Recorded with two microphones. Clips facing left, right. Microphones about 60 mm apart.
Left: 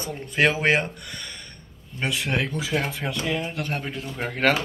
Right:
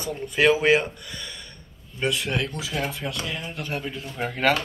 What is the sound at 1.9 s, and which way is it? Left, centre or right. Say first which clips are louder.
Speech: right 2 dB; left.